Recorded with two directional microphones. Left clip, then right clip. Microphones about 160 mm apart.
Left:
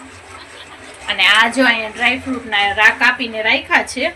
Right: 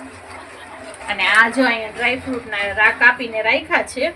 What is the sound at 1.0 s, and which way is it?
Speech, 15° left (ahead or behind).